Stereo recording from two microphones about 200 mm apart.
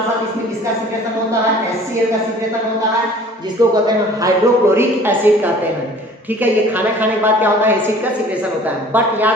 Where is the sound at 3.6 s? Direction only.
20° right (ahead or behind).